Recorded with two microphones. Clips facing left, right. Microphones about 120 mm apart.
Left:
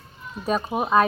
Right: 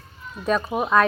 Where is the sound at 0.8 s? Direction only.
20° left (ahead or behind).